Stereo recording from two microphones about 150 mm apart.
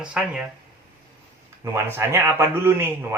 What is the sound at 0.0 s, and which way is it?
Speech, 5° right (ahead or behind).